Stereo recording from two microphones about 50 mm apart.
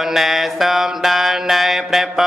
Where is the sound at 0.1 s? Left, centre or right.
Centre.